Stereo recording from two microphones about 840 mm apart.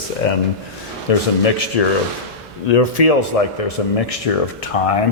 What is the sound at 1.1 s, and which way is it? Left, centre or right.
Speech, left.